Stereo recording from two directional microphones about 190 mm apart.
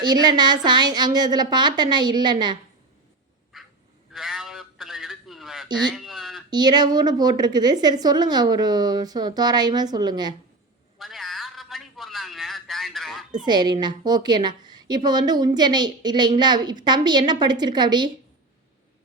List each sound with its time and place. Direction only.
0.0 s a woman's voice: 20° right (ahead or behind)
3.5 s duck: centre (ahead or behind)
4.1 s a sound: centre (ahead or behind)
6.5 s a woman's voice: 20° right (ahead or behind)
10.9 s a sound: centre (ahead or behind)
13.4 s a woman's voice: 20° right (ahead or behind)